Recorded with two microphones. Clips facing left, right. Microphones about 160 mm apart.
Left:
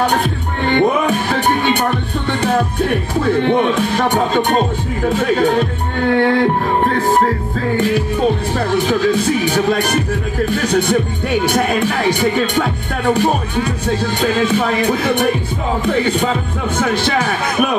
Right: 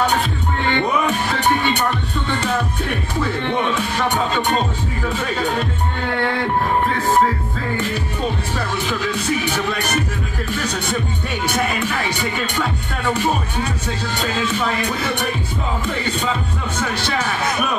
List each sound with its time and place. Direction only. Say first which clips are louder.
0.0 s music: left 3 dB; 50° left (ahead or behind)
3.4 s speech: left 6 dB; 50° left (ahead or behind)
8.5 s speech: left 7 dB; 55° left (ahead or behind)
15.8 s music: left 8 dB; 55° left (ahead or behind)
16.7 s speech: left 7 dB; 55° left (ahead or behind)